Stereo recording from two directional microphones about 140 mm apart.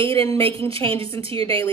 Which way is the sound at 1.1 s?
40° right (ahead or behind).